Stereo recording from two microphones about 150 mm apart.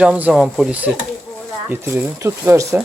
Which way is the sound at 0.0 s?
10° right (ahead or behind).